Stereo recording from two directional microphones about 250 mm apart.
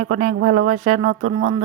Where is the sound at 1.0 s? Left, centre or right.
Right.